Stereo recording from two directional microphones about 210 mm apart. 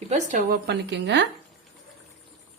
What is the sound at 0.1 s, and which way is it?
Speech, 35° right (ahead or behind).